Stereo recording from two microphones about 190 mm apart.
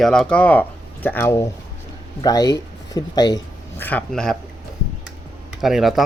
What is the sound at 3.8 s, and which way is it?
Speech, 10° left (ahead or behind).